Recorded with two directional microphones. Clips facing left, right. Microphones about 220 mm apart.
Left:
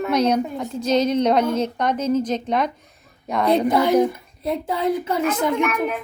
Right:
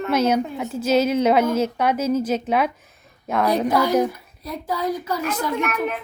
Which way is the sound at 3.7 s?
25° left (ahead or behind).